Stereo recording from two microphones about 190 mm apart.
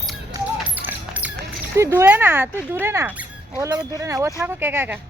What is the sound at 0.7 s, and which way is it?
Music, 10° right (ahead or behind).